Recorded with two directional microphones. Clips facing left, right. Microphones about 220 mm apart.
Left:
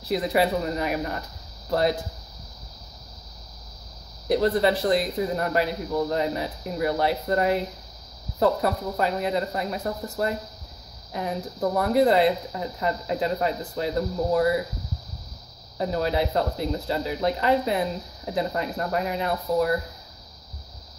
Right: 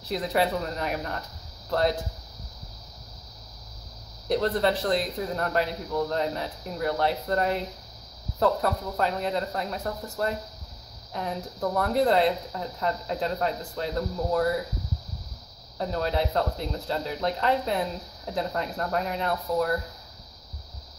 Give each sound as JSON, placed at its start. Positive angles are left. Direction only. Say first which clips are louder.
{"t": 0.1, "sound": "speech", "louder": "left 3 dB", "side_deg": 10}
{"t": 4.3, "sound": "speech", "louder": "left 3 dB", "side_deg": 10}
{"t": 15.8, "sound": "speech", "louder": "left 3 dB", "side_deg": 10}